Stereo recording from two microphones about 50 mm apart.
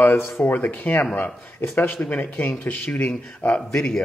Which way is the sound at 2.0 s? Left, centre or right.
Left.